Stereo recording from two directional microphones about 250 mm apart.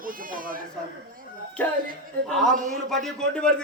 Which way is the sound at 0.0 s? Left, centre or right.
Right.